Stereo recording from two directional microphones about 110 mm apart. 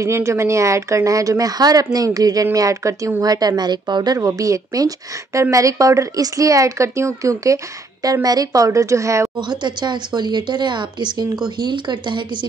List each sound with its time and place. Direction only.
0.0 s a woman's voice: 25° right (ahead or behind)
9.4 s speech: 45° right (ahead or behind)